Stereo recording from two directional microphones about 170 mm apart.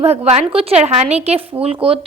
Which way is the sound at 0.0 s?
35° right (ahead or behind).